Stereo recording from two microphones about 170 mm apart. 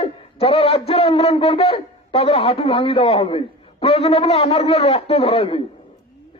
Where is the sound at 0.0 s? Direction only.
35° left (ahead or behind).